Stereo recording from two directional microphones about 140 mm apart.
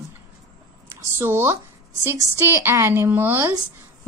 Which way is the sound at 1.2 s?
15° right (ahead or behind).